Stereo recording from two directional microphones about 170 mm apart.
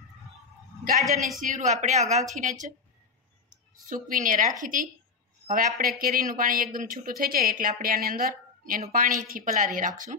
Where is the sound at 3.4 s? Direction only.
50° right (ahead or behind).